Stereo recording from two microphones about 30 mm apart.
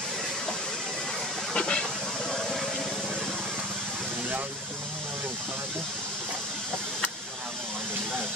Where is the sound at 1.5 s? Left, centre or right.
Left.